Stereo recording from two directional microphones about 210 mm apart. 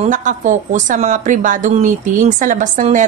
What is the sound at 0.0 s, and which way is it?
A woman's voice, 40° right (ahead or behind).